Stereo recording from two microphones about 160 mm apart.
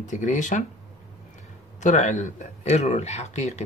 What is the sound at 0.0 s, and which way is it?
Speech, 50° left (ahead or behind).